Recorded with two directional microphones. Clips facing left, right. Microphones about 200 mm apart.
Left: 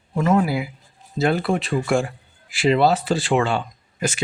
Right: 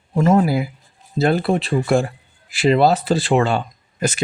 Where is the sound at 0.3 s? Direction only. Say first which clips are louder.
Right 3 dB; 40° right (ahead or behind).